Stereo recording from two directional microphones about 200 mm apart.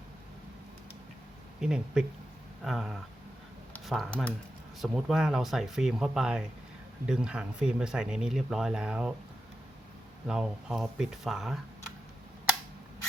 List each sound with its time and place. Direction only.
1.6 s speech: 5° right (ahead or behind)
3.7 s a sound: centre (ahead or behind)
4.8 s speech: centre (ahead or behind)
10.2 s speech: 5° right (ahead or behind)